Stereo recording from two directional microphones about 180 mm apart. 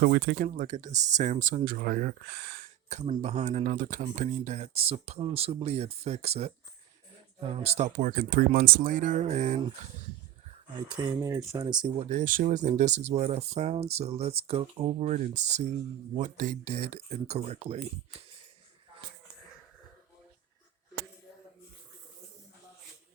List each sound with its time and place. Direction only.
0.0 s speech: 60° right (ahead or behind)
0.4 s speech: 45° right (ahead or behind)
3.1 s speech: 35° right (ahead or behind)
10.9 s speech: 15° right (ahead or behind)
12.0 s speech: 45° right (ahead or behind)